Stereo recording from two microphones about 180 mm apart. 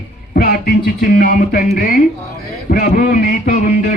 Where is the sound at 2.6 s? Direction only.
50° left (ahead or behind).